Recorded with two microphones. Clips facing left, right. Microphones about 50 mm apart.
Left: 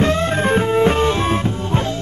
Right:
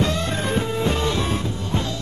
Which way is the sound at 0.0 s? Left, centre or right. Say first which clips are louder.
Left 6 dB; left.